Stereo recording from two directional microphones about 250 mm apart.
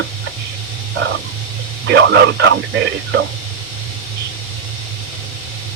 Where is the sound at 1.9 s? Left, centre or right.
Right.